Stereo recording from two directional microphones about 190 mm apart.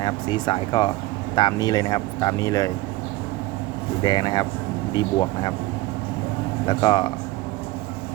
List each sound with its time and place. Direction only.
0.0 s speech: 25° left (ahead or behind)
4.0 s speech: 25° left (ahead or behind)
6.7 s speech: 20° left (ahead or behind)